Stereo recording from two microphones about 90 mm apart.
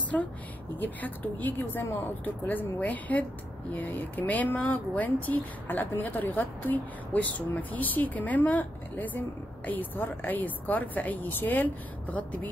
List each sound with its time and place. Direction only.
0.1 s a woman's voice: 15° left (ahead or behind)